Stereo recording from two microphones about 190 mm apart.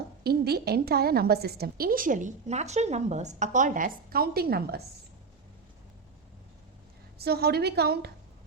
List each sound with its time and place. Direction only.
0.3 s a woman's voice: 55° right (ahead or behind)
7.2 s a woman's voice: 55° right (ahead or behind)